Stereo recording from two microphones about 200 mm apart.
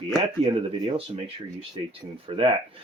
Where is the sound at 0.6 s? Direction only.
25° right (ahead or behind).